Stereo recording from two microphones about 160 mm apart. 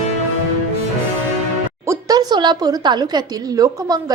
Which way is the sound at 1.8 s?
20° right (ahead or behind).